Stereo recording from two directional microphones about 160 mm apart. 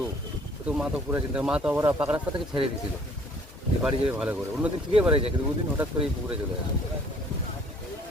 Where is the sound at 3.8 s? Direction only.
5° right (ahead or behind).